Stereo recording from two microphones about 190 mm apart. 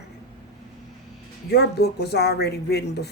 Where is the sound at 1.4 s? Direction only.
60° left (ahead or behind).